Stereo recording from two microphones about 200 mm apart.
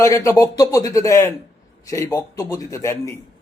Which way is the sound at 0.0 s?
15° left (ahead or behind).